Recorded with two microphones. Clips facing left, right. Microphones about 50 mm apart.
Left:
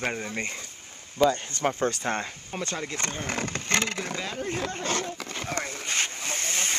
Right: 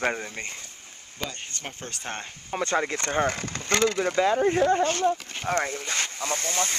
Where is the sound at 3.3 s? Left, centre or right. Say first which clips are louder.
Right 1 dB; left.